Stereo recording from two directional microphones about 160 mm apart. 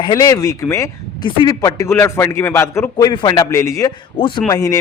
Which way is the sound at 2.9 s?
25° left (ahead or behind).